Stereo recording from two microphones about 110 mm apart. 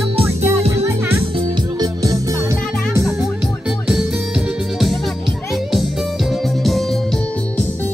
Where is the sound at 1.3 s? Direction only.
45° right (ahead or behind).